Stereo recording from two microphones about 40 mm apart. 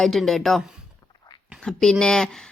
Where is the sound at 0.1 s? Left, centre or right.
Centre.